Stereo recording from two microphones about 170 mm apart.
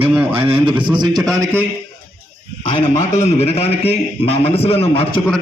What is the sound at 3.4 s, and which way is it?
A man's voice, 35° left (ahead or behind).